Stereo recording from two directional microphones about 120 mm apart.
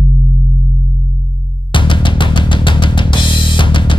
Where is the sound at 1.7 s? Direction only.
45° left (ahead or behind).